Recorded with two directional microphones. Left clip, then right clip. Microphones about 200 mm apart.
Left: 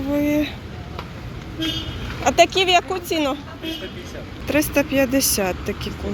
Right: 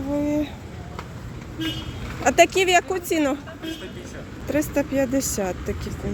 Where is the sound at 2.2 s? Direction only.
30° right (ahead or behind).